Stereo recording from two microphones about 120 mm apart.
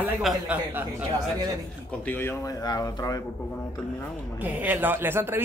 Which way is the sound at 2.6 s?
30° left (ahead or behind).